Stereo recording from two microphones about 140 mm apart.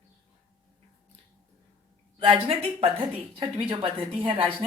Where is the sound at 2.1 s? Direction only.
40° right (ahead or behind).